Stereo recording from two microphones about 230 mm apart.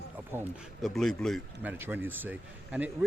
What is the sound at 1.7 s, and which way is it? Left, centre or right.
Speech, centre.